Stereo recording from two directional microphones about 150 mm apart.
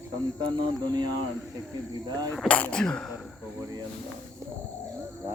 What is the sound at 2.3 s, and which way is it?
Speech, 5° left (ahead or behind).